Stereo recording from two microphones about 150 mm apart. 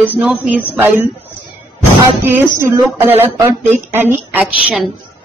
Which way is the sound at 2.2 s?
15° right (ahead or behind).